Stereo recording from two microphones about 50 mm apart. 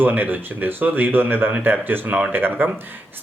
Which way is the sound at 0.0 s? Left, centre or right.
Right.